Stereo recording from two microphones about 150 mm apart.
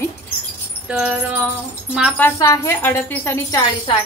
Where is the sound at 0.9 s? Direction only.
5° right (ahead or behind).